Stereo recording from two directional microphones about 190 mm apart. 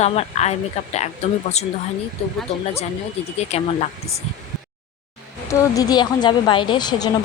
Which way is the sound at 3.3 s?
35° left (ahead or behind).